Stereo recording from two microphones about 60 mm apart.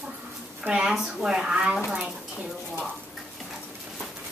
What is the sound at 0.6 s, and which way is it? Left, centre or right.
A woman's voice, centre.